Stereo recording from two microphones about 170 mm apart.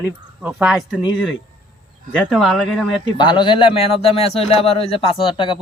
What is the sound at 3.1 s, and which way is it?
A man's voice, 25° left (ahead or behind).